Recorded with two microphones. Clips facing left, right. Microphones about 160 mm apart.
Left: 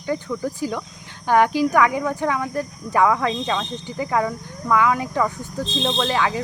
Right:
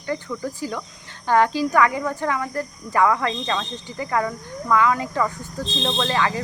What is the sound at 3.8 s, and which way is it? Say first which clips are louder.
Speech: left 2 dB; 15° left (ahead or behind).